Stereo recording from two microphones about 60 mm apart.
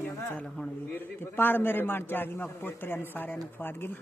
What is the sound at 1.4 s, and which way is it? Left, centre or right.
A man's voice, left.